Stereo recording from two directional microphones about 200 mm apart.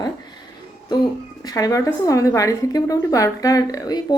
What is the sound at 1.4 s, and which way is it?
A woman's voice, 15° left (ahead or behind).